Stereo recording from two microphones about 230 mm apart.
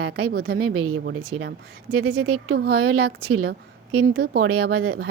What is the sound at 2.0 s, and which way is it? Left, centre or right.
Speech, right.